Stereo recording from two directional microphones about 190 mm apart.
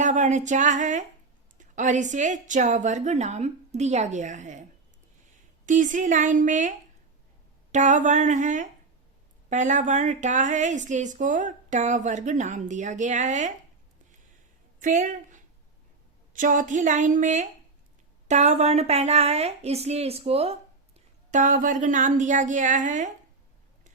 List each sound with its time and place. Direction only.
0.0 s a woman's voice: 40° right (ahead or behind)
5.6 s a woman's voice: 40° right (ahead or behind)
14.8 s a woman's voice: 45° right (ahead or behind)